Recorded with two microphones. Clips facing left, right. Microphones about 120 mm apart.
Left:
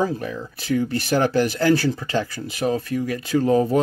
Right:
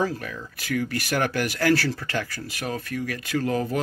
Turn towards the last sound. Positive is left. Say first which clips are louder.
# left 7 dB
turn(degrees=25)  # may be behind; listen again after turning